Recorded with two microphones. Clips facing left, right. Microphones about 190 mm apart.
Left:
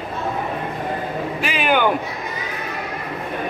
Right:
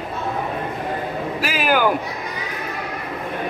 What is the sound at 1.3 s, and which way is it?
Speech, centre (ahead or behind).